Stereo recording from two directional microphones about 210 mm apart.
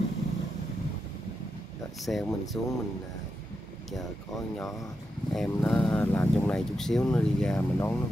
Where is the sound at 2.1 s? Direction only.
5° left (ahead or behind).